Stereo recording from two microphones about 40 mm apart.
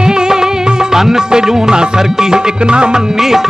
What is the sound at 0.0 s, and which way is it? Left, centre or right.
Music, centre.